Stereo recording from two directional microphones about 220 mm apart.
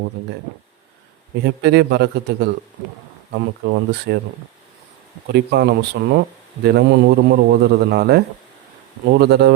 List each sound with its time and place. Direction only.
1.5 s a man's voice: 50° right (ahead or behind)
5.3 s a man's voice: 50° right (ahead or behind)